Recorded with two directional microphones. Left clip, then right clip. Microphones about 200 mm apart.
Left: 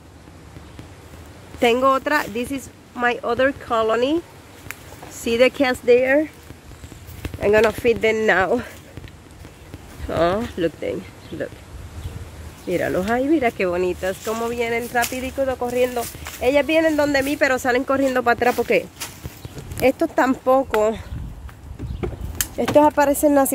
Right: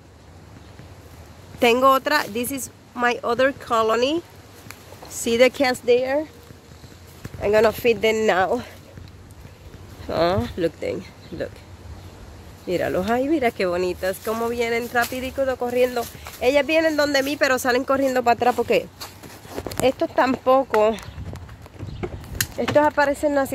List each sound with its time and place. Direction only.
1.6 s speech: 10° right (ahead or behind)
5.2 s speech: 10° right (ahead or behind)
5.9 s speech: 20° left (ahead or behind)
7.3 s speech: 5° left (ahead or behind)
10.0 s speech: 5° right (ahead or behind)
12.6 s speech: 5° right (ahead or behind)
19.8 s speech: 10° left (ahead or behind)
22.6 s speech: 15° left (ahead or behind)